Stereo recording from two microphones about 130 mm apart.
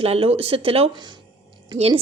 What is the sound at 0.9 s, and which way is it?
Speech, 35° right (ahead or behind).